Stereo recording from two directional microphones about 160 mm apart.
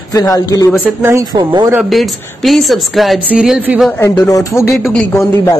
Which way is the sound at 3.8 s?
15° left (ahead or behind).